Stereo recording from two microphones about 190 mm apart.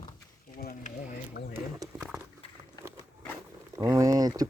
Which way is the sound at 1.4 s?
60° left (ahead or behind).